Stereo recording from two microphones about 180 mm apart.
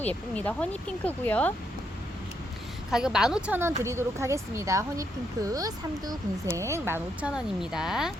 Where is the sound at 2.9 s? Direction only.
5° right (ahead or behind).